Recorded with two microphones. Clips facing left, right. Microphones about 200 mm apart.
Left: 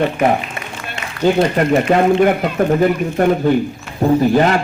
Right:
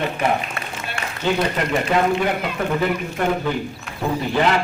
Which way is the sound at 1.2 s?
40° left (ahead or behind).